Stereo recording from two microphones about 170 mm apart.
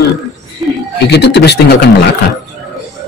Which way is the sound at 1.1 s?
80° left.